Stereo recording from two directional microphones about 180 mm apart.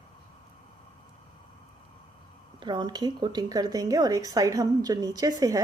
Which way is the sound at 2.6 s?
25° right (ahead or behind).